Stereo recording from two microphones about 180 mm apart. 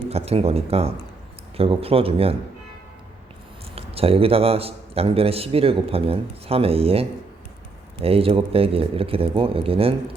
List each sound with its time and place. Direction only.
0.1 s a man's voice: 35° right (ahead or behind)
3.8 s a man's voice: 30° right (ahead or behind)